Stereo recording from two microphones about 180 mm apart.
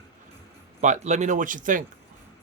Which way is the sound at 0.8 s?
40° right (ahead or behind).